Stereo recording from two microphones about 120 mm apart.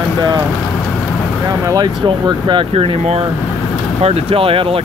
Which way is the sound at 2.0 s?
40° right (ahead or behind).